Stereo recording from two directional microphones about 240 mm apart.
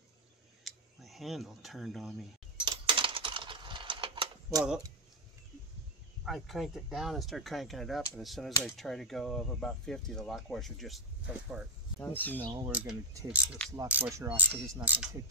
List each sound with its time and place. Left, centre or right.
0.7 s a sound: centre
2.6 s a sound: centre
4.6 s speech: centre
6.2 s speech: centre
12.0 s speech: centre
12.4 s speech: centre